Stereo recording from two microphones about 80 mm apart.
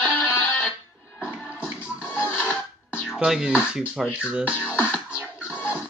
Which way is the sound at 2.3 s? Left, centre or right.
Left.